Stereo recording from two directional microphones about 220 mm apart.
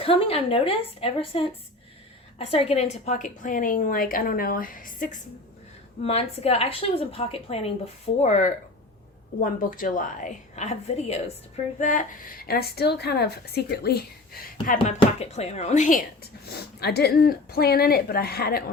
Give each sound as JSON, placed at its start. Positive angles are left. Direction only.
{"t": 0.0, "sound": "a woman's voice", "side_deg": 25}